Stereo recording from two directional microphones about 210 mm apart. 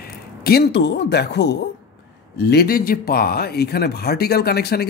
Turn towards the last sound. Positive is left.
turn(degrees=50)  # may be behind; listen again after turning